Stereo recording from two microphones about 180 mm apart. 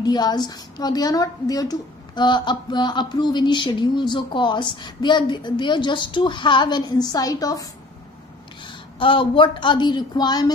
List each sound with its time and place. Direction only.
0.0 s a woman's voice: 25° left (ahead or behind)